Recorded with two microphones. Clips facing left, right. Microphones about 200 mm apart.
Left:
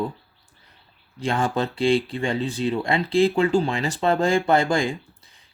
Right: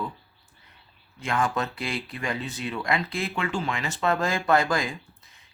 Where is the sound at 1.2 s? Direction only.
30° left (ahead or behind).